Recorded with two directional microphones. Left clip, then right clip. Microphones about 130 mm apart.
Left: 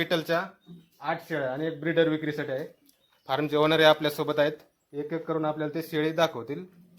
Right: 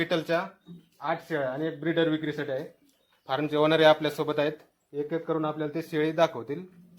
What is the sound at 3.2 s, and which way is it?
A man's voice, 40° left (ahead or behind).